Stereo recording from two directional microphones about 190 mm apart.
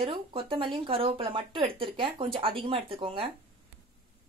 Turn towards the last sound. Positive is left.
turn(degrees=-30)  # may be behind; listen again after turning